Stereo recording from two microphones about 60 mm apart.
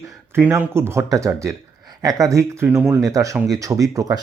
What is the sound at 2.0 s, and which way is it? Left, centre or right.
Speech, right.